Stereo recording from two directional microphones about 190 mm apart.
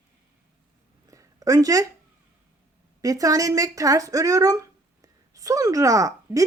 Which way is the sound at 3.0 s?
20° right (ahead or behind).